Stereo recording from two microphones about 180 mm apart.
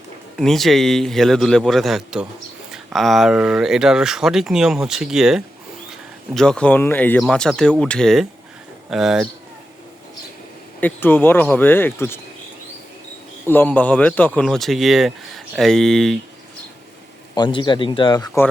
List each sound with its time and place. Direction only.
0.3 s speech: centre (ahead or behind)
10.8 s speech: 10° left (ahead or behind)
13.5 s speech: 10° left (ahead or behind)
17.3 s speech: 25° left (ahead or behind)